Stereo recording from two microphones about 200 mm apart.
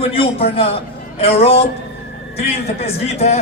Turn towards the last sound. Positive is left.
turn(degrees=30)  # may be behind; listen again after turning